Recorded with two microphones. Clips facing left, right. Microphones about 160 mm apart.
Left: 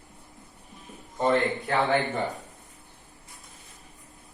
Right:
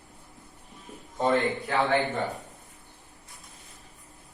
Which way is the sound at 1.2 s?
Centre (ahead or behind).